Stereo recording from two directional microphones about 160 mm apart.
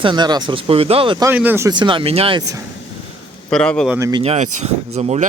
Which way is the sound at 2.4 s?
20° right (ahead or behind).